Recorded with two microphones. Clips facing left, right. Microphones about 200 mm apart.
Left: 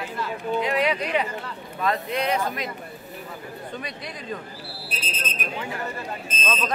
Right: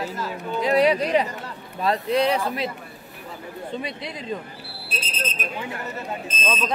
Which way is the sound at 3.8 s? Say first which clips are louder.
Right 6 dB; 25° right (ahead or behind).